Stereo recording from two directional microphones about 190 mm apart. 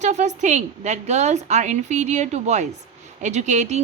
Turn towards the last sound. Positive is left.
turn(degrees=-40)  # may be behind; listen again after turning